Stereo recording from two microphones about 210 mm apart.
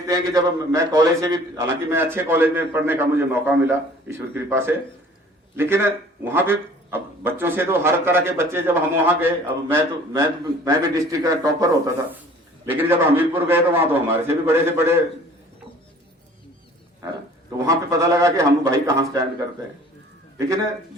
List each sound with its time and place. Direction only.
0.1 s a man's voice: 15° right (ahead or behind)
17.7 s a man's voice: 15° right (ahead or behind)